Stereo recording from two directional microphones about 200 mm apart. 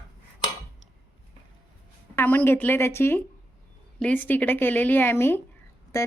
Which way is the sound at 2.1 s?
10° left (ahead or behind).